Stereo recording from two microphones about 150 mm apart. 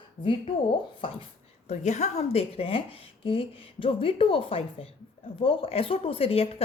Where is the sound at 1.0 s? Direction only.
35° left (ahead or behind).